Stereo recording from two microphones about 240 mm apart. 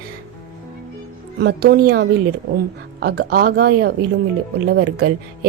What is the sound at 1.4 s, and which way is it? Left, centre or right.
A woman's voice, right.